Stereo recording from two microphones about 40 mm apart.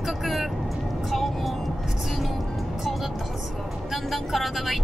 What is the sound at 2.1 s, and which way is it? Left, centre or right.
Music, centre.